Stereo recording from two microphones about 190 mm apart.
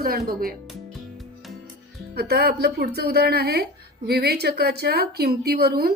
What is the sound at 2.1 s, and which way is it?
A woman's voice, 55° right (ahead or behind).